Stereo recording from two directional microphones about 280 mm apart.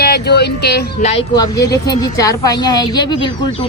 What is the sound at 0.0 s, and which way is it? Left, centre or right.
Speech, left.